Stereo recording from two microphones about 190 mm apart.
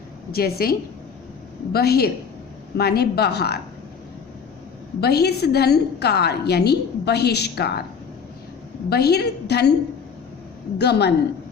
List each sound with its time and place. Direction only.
0.3 s a woman's voice: 55° left (ahead or behind)
4.9 s a woman's voice: 55° left (ahead or behind)
8.9 s a woman's voice: 55° left (ahead or behind)
10.8 s a woman's voice: 60° left (ahead or behind)